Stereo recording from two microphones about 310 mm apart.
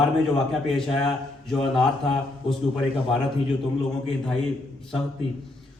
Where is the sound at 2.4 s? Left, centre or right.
Centre.